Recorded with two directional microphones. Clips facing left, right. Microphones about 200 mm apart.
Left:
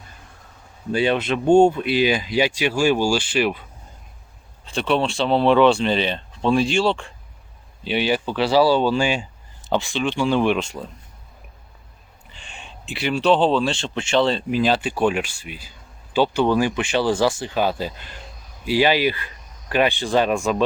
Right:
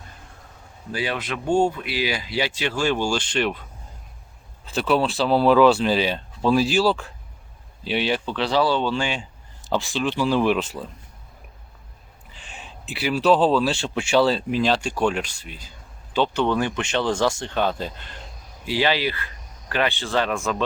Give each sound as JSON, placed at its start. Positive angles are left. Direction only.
{"t": 0.9, "sound": "speech", "side_deg": 25}
{"t": 4.6, "sound": "speech", "side_deg": -5}
{"t": 9.6, "sound": "speech", "side_deg": 0}
{"t": 12.3, "sound": "a sound", "side_deg": 0}
{"t": 13.6, "sound": "speech", "side_deg": -5}